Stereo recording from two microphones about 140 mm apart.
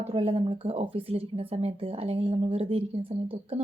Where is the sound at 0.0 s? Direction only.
45° right (ahead or behind).